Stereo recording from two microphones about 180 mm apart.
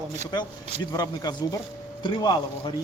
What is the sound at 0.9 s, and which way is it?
A man's voice, 20° left (ahead or behind).